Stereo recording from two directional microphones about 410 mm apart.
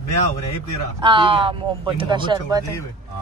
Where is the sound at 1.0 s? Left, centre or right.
Centre.